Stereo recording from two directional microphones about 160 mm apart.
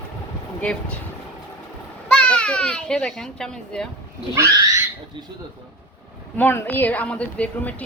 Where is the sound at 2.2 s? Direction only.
5° left (ahead or behind).